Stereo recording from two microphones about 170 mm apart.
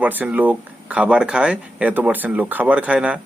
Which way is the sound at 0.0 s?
10° right (ahead or behind).